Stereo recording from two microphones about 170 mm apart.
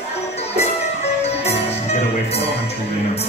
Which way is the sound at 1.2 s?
40° left (ahead or behind).